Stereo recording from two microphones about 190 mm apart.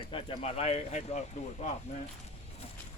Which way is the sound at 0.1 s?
30° left (ahead or behind).